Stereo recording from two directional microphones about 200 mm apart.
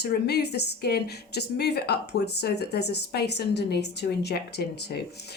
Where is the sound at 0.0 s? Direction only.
55° left (ahead or behind).